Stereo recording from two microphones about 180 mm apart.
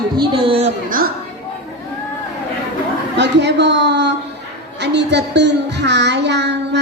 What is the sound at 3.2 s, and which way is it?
Child singing, 70° right (ahead or behind).